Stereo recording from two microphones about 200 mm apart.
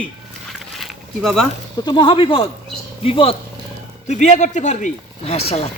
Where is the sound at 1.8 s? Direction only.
20° left (ahead or behind).